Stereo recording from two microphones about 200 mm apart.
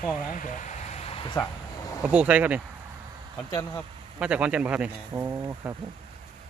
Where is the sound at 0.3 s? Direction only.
40° left (ahead or behind).